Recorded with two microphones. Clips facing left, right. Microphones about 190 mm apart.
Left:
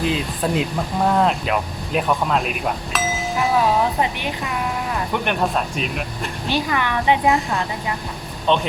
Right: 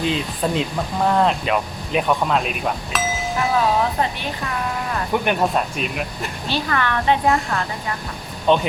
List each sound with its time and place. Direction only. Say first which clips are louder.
0.0 s speech: even; 5° left (ahead or behind)
5.1 s speech: right 3 dB; 5° right (ahead or behind)
6.5 s a woman's voice: left 1 dB; 15° left (ahead or behind)
8.5 s speech: right 2 dB; 5° right (ahead or behind)